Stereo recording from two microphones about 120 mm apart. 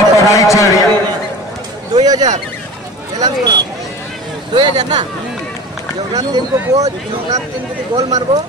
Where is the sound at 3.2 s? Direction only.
35° right (ahead or behind).